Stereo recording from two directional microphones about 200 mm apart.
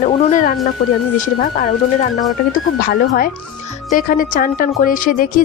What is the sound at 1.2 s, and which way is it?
Speech, 45° left (ahead or behind).